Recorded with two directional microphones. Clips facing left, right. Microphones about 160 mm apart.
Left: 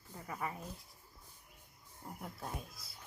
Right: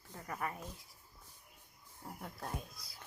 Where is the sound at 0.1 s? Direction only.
5° left (ahead or behind).